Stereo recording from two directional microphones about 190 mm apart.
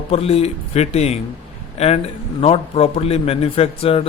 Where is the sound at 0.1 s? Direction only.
30° left (ahead or behind).